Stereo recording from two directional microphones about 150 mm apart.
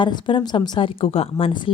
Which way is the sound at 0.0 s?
30° left (ahead or behind).